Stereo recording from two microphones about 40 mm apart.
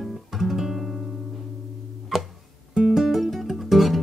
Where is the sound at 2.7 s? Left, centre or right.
Centre.